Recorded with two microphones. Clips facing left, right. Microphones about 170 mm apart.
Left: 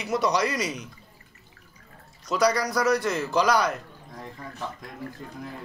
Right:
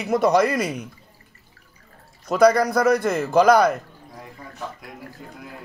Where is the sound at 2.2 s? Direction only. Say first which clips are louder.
Right 7 dB; 55° right (ahead or behind).